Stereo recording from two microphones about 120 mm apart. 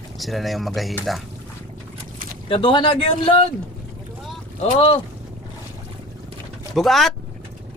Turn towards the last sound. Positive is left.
turn(degrees=0)  # may be behind; listen again after turning